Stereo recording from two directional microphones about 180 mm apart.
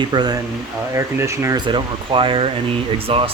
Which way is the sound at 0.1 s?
25° right (ahead or behind).